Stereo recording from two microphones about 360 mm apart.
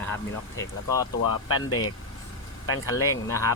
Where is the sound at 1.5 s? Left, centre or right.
Left.